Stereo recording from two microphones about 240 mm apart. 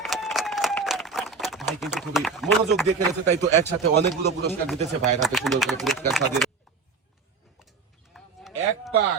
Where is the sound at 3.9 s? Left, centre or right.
Right.